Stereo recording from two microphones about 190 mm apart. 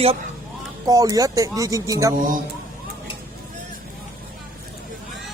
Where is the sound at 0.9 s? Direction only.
20° right (ahead or behind).